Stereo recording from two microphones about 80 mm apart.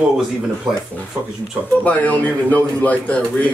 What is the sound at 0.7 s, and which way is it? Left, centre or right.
Speech, centre.